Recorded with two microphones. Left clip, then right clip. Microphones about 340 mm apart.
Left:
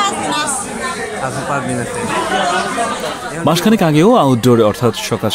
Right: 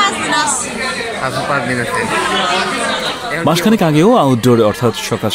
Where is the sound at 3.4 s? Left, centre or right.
Centre.